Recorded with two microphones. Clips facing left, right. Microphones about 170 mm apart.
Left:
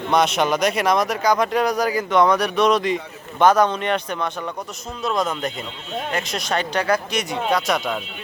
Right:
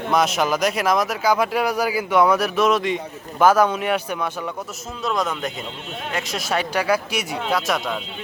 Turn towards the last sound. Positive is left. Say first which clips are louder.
# left 1 dB
turn(degrees=0)  # may be behind; listen again after turning